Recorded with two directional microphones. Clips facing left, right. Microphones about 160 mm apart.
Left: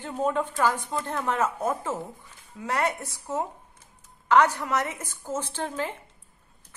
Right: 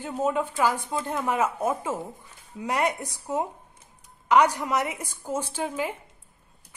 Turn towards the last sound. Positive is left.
turn(degrees=-10)  # may be behind; listen again after turning